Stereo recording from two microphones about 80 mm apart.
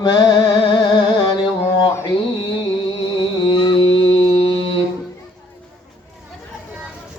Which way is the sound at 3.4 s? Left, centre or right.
Left.